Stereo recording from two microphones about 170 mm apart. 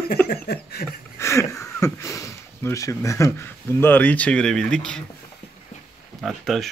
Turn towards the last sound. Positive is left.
turn(degrees=0)  # may be behind; listen again after turning